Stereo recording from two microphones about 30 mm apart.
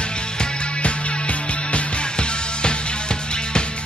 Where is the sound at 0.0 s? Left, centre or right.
Left.